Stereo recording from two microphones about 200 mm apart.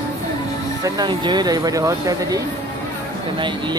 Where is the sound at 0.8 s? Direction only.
20° right (ahead or behind).